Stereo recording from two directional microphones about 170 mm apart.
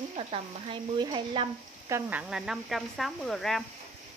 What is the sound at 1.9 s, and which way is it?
Speech, 10° right (ahead or behind).